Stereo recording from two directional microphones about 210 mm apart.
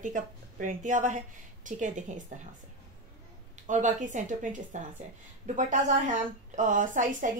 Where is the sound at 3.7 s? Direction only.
35° right (ahead or behind).